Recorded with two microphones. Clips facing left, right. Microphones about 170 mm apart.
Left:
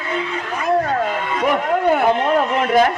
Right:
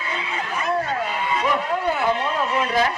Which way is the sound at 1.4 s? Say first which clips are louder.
Left 7 dB; 55° left (ahead or behind).